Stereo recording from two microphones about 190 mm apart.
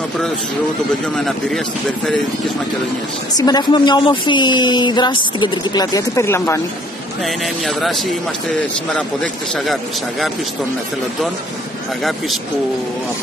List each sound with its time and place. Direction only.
1.0 s a man's voice: centre (ahead or behind)
3.3 s speech: 20° left (ahead or behind)
7.2 s a man's voice: centre (ahead or behind)